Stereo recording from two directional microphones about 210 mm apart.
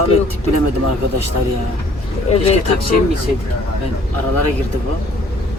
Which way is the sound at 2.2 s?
30° left (ahead or behind).